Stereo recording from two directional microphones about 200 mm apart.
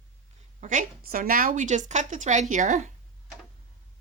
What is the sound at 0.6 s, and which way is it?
A woman's voice, 40° right (ahead or behind).